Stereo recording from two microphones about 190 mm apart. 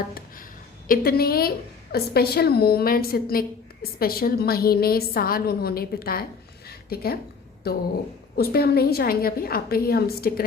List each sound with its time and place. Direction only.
0.9 s a woman's voice: 50° left (ahead or behind)
6.7 s a sound: 55° left (ahead or behind)
8.4 s a woman's voice: 55° left (ahead or behind)